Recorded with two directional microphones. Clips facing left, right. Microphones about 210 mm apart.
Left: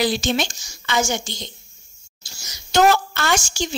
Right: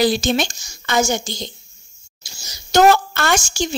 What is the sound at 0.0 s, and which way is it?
A woman's voice, 40° right (ahead or behind).